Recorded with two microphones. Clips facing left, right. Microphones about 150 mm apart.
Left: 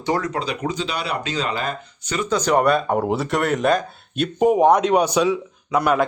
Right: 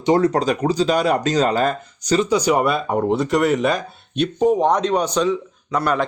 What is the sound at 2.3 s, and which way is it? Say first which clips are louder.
Speech: left 5 dB; 10° right (ahead or behind).